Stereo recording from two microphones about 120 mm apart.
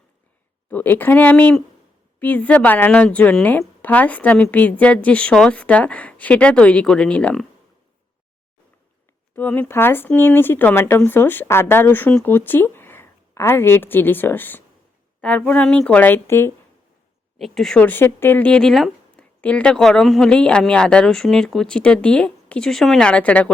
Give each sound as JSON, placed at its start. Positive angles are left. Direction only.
{"t": 0.7, "sound": "speech", "side_deg": 15}
{"t": 9.3, "sound": "speech", "side_deg": 15}
{"t": 17.3, "sound": "speech", "side_deg": 0}